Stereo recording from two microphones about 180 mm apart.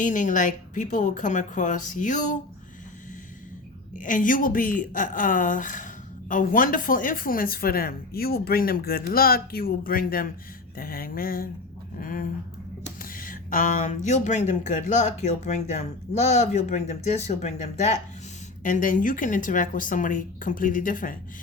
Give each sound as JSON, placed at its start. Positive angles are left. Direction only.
{"t": 0.0, "sound": "a woman's voice", "side_deg": 45}
{"t": 3.9, "sound": "a woman's voice", "side_deg": 45}